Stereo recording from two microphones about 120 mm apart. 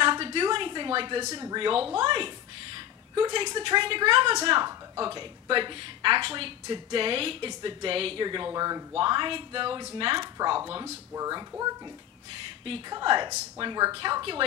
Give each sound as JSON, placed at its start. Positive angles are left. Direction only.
{"t": 0.0, "sound": "a sound", "side_deg": -45}
{"t": 1.2, "sound": "speech", "side_deg": -30}
{"t": 1.6, "sound": "a woman's voice", "side_deg": -50}
{"t": 8.9, "sound": "a woman's voice", "side_deg": -45}
{"t": 12.9, "sound": "speech", "side_deg": -40}